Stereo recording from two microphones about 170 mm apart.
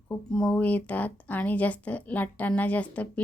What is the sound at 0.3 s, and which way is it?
Speech, 5° left (ahead or behind).